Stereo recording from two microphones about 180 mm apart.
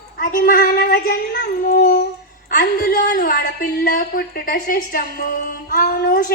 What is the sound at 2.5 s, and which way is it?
A woman's voice, 65° left (ahead or behind).